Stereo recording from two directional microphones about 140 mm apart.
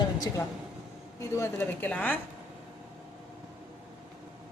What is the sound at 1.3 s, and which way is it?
Speech, 15° left (ahead or behind).